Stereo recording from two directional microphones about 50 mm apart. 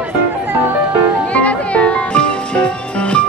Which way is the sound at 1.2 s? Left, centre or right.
Left.